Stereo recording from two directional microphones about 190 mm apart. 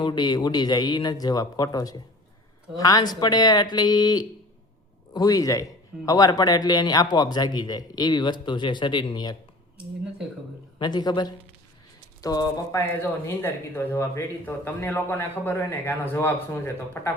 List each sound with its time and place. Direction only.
0.0 s a man's voice: 25° left (ahead or behind)
10.8 s a man's voice: 20° left (ahead or behind)